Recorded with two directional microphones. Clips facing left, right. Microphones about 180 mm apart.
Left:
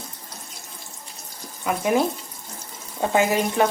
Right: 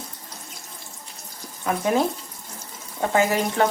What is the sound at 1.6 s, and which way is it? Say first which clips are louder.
Speech: left 1 dB; 15° left (ahead or behind).